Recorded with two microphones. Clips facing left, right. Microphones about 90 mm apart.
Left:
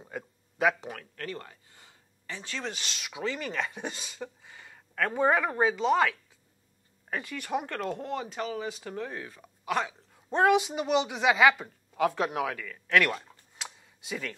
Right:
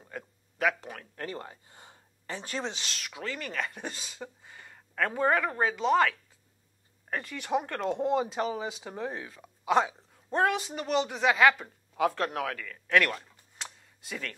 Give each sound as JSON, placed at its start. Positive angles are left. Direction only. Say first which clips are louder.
{"t": 0.0, "sound": "a sound", "louder": "left 2 dB", "side_deg": 10}
{"t": 1.1, "sound": "a sound", "louder": "right 1 dB", "side_deg": -25}
{"t": 2.7, "sound": "a woman's voice", "louder": "left 1 dB", "side_deg": 10}
{"t": 5.2, "sound": "a woman's voice", "louder": "left 2 dB", "side_deg": 10}
{"t": 7.3, "sound": "speech", "louder": "right 3 dB", "side_deg": -15}
{"t": 7.6, "sound": "speech", "louder": "right 4 dB", "side_deg": 0}
{"t": 8.4, "sound": "speech", "louder": "right 3 dB", "side_deg": -20}
{"t": 8.6, "sound": "speech", "louder": "left 1 dB", "side_deg": -10}
{"t": 8.9, "sound": "speech", "louder": "right 1 dB", "side_deg": -25}
{"t": 10.3, "sound": "a woman's voice", "louder": "left 4 dB", "side_deg": 5}
{"t": 13.1, "sound": "a sound", "louder": "left 2 dB", "side_deg": 5}